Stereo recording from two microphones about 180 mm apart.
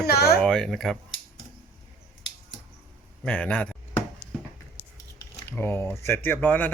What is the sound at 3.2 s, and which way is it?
Speech, 5° left (ahead or behind).